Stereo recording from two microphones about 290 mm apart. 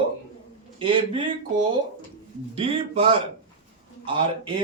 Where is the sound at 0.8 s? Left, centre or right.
Centre.